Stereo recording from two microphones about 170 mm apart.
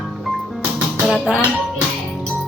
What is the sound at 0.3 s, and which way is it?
Music, centre (ahead or behind).